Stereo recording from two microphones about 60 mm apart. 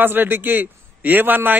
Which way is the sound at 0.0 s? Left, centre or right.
Right.